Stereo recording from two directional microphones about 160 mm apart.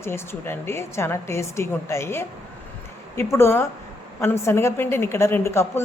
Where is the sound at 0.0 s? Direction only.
15° left (ahead or behind).